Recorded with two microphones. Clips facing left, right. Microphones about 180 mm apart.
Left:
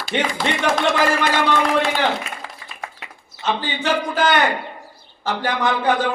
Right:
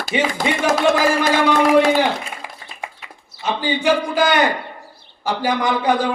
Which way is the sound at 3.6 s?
10° right (ahead or behind).